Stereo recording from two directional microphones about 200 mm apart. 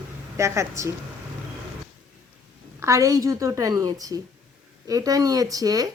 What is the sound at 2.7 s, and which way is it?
A woman's voice, 15° right (ahead or behind).